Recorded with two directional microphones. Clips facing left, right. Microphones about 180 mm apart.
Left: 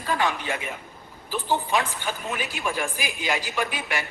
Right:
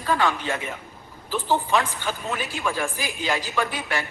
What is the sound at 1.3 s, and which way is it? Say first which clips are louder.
A woman's voice: right 2 dB; 15° left (ahead or behind).